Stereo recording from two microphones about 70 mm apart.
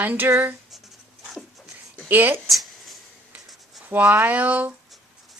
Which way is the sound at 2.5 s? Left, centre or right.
Centre.